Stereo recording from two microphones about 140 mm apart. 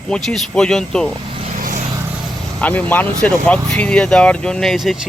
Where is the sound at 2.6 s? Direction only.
10° left (ahead or behind).